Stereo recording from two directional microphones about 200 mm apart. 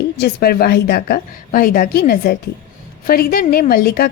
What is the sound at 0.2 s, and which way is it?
A woman's voice, 50° left (ahead or behind).